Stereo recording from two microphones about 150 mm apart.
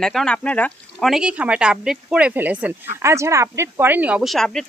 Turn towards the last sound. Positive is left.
turn(degrees=0)  # may be behind; listen again after turning